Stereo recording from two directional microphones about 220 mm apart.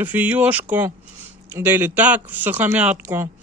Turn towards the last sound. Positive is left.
turn(degrees=-10)  # may be behind; listen again after turning